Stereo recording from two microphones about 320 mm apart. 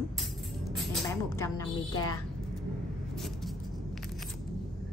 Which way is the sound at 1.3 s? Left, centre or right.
Centre.